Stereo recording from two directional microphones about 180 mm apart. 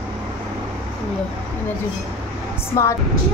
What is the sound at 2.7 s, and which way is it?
Speech, 15° left (ahead or behind).